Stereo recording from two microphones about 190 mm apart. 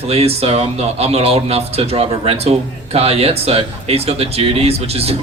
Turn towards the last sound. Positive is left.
turn(degrees=-30)  # may be behind; listen again after turning